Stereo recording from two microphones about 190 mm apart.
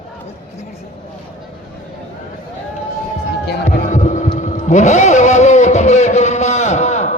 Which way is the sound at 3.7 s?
40° left (ahead or behind).